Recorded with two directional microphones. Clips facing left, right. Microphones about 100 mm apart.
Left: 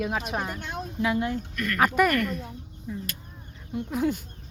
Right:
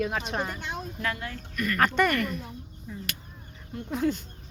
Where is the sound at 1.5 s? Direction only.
5° right (ahead or behind).